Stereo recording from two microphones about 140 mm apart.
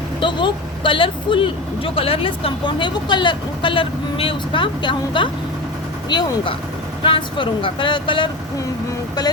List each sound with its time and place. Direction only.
0.2 s speech: 35° left (ahead or behind)